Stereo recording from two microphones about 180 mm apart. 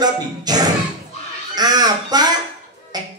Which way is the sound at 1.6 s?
20° right (ahead or behind).